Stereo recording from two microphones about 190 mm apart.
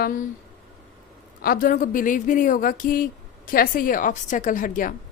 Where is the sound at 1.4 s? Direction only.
50° left (ahead or behind).